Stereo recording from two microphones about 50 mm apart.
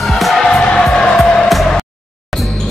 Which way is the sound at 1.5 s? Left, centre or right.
Centre.